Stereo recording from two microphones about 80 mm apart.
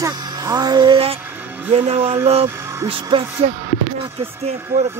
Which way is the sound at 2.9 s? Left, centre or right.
Right.